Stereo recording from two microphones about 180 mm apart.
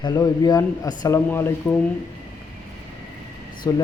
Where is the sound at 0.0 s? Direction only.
20° left (ahead or behind).